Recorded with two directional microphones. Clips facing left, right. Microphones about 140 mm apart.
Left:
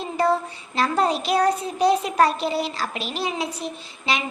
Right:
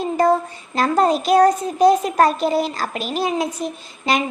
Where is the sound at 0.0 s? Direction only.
45° right (ahead or behind).